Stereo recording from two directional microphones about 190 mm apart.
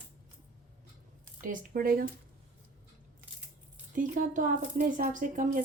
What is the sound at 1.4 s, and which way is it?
Speech, 45° right (ahead or behind).